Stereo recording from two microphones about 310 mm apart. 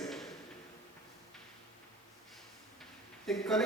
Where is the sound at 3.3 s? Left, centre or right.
Centre.